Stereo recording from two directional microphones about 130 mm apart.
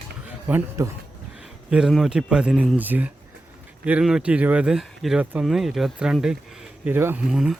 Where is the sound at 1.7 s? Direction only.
5° right (ahead or behind).